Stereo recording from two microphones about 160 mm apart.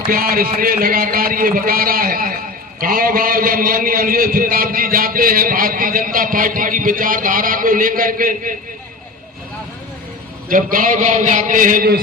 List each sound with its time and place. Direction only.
0.1 s a man's voice: 65° right (ahead or behind)
10.5 s a man's voice: 60° right (ahead or behind)